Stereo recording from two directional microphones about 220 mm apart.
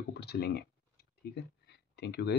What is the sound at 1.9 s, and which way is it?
Speech, 50° left (ahead or behind).